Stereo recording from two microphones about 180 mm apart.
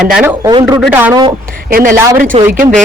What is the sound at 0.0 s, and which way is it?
A man's voice, 5° right (ahead or behind).